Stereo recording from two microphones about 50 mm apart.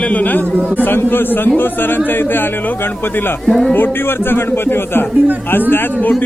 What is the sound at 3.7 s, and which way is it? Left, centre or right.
A man's voice, left.